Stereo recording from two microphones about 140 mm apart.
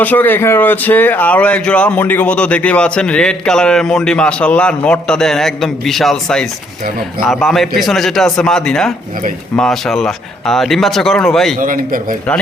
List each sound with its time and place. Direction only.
0.0 s speech: 15° left (ahead or behind)
11.6 s a man's voice: 75° right (ahead or behind)